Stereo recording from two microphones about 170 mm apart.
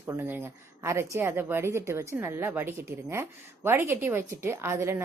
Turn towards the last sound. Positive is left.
turn(degrees=-15)  # may be behind; listen again after turning